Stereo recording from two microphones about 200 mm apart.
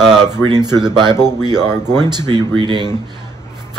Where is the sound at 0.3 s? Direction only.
20° right (ahead or behind).